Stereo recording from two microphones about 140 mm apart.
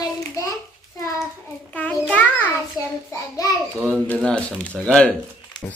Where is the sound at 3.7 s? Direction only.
15° right (ahead or behind).